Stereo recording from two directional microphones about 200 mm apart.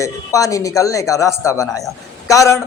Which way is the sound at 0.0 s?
15° left (ahead or behind).